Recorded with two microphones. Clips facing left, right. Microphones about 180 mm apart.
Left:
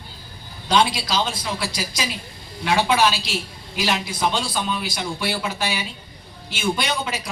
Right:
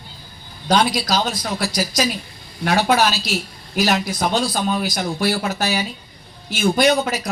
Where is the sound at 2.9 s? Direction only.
45° right (ahead or behind).